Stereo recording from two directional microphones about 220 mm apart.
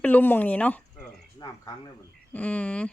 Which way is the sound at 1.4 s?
20° left (ahead or behind).